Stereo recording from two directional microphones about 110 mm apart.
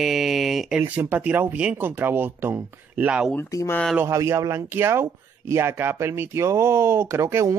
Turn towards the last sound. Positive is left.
turn(degrees=-25)  # may be behind; listen again after turning